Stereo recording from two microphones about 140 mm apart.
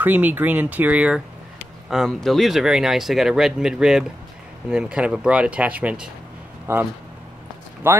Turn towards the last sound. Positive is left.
turn(degrees=-15)  # may be behind; listen again after turning